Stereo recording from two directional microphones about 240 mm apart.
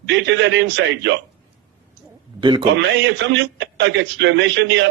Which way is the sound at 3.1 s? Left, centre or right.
Right.